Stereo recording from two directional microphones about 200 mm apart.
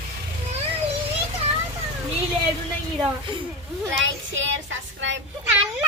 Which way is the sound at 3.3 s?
25° right (ahead or behind).